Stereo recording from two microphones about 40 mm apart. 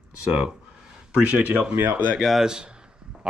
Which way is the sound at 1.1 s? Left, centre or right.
Right.